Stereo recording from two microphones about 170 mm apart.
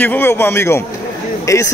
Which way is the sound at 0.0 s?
10° left (ahead or behind).